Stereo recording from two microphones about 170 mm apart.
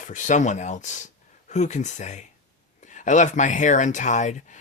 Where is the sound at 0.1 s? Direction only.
45° left (ahead or behind).